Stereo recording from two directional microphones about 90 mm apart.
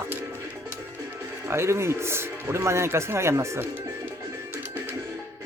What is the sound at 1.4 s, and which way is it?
Speech, 30° right (ahead or behind).